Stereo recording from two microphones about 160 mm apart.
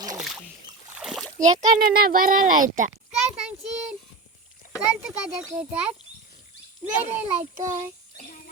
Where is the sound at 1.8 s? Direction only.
65° right (ahead or behind).